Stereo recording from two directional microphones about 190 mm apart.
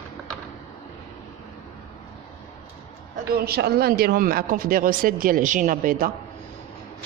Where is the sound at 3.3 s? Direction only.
55° right (ahead or behind).